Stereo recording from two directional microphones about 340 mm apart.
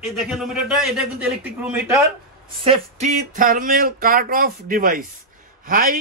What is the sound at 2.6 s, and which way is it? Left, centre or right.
Speech, centre.